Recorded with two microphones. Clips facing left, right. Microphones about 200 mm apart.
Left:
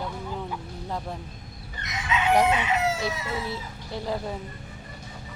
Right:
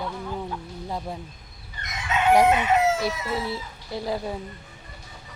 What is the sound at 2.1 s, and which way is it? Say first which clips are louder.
Chicken: right 2 dB; 50° right (ahead or behind).